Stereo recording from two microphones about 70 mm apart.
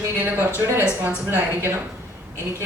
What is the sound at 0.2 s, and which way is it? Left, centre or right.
A man's voice, right.